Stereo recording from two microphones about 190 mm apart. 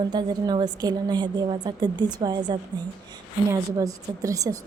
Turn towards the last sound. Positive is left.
turn(degrees=-15)  # may be behind; listen again after turning